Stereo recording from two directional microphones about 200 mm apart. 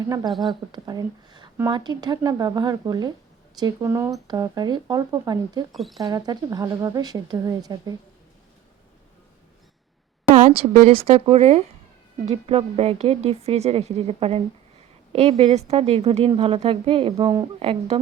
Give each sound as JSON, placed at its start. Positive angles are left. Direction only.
{"t": 0.3, "sound": "speech", "side_deg": 0}
{"t": 0.7, "sound": "a woman's voice", "side_deg": -20}
{"t": 5.7, "sound": "speech", "side_deg": 0}
{"t": 6.0, "sound": "a woman's voice", "side_deg": -20}
{"t": 10.3, "sound": "a woman's voice", "side_deg": -35}